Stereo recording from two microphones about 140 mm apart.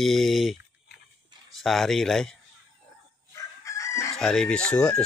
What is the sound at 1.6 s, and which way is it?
Speech, centre (ahead or behind).